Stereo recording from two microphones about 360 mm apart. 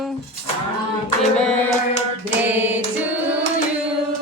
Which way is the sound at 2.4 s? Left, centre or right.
Centre.